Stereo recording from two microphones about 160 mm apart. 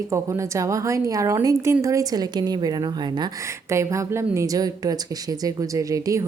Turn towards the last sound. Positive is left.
turn(degrees=-20)  # may be behind; listen again after turning